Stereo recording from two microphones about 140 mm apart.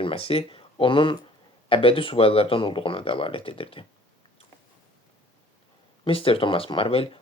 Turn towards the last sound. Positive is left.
turn(degrees=40)  # may be behind; listen again after turning